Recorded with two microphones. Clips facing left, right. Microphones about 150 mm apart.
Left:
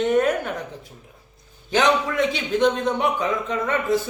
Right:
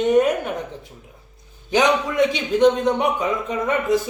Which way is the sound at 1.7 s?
15° right (ahead or behind).